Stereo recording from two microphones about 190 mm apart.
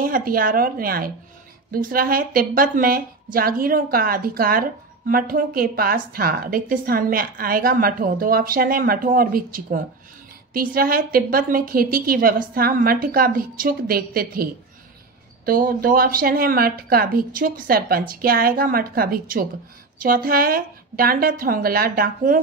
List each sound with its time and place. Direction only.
0.0 s a woman's voice: 50° right (ahead or behind)